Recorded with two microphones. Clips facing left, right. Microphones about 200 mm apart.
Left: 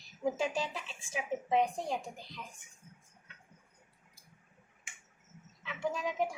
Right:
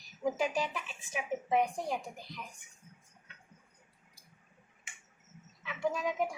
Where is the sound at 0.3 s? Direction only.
25° left (ahead or behind).